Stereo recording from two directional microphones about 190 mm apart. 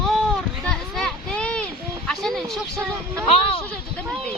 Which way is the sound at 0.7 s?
5° left (ahead or behind).